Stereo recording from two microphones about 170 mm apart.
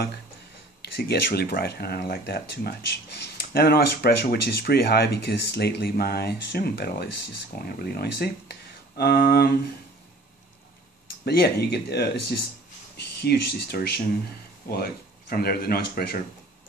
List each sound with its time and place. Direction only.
0.9 s speech: 70° left (ahead or behind)
11.2 s speech: 70° left (ahead or behind)